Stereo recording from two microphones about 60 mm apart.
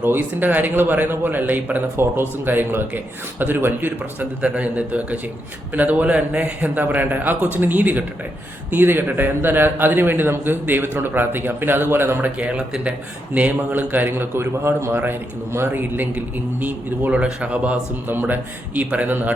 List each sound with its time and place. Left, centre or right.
0.0 s a man's voice: right
12.4 s a man's voice: centre
18.1 s a man's voice: right